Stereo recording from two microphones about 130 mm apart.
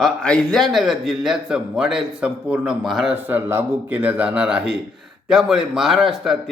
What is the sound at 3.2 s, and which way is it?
A man's voice, 15° right (ahead or behind).